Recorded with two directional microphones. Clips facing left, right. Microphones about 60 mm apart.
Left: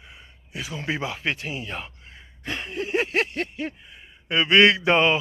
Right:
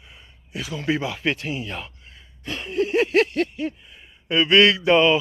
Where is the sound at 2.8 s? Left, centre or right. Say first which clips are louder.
Right 5 dB; centre.